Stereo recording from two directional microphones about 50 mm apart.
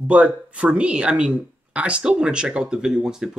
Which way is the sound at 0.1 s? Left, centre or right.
Right.